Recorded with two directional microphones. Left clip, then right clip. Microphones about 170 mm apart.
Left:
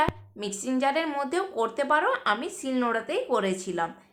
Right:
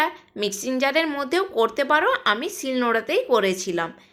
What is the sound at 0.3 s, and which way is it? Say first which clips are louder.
Speech: right 7 dB; 25° right (ahead or behind).